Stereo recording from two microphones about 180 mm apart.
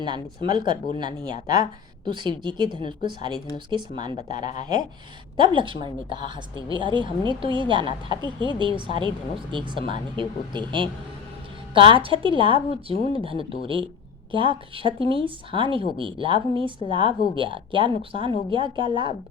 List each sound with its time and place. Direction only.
0.0 s a woman's voice: 25° right (ahead or behind)
14.3 s a woman's voice: 30° right (ahead or behind)